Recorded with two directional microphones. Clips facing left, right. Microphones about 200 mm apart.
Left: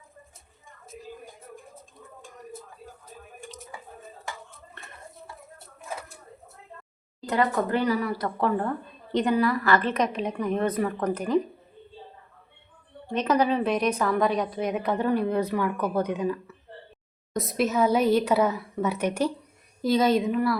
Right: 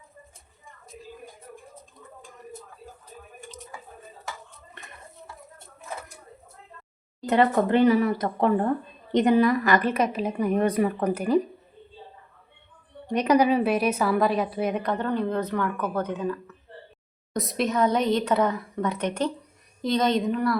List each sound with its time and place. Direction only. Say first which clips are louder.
7.3 s a woman's voice: right 4 dB; 25° right (ahead or behind); by 11.3 s 10° right (ahead or behind)
13.1 s a woman's voice: right 3 dB; 15° right (ahead or behind); by 16.6 s 10° left (ahead or behind)
17.3 s a woman's voice: left 1 dB; centre (ahead or behind)